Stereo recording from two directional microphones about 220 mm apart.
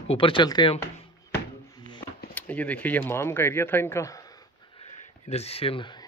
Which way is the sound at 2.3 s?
5° left (ahead or behind).